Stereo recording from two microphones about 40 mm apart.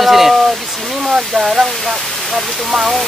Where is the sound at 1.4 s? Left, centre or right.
Centre.